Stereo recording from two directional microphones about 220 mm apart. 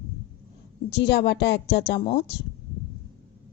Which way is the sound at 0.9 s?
50° left (ahead or behind).